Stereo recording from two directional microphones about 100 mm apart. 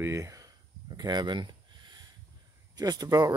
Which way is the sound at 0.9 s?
45° right (ahead or behind).